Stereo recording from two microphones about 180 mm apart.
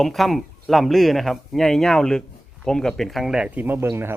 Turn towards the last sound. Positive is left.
turn(degrees=-15)  # may be behind; listen again after turning